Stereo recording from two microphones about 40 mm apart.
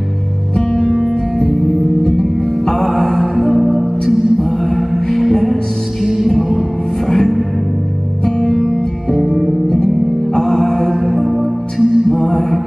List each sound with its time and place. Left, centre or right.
0.7 s music: centre
2.0 s music: centre
2.9 s music: centre
3.3 s music: centre
7.1 s music: centre
10.3 s music: centre
12.1 s music: centre